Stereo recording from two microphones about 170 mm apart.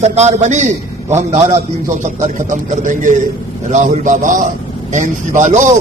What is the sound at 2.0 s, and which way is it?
A man's voice, 45° right (ahead or behind).